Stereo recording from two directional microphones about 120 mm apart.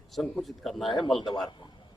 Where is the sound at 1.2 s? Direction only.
40° left (ahead or behind).